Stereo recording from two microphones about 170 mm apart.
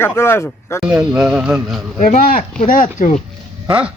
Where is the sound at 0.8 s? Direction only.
5° right (ahead or behind).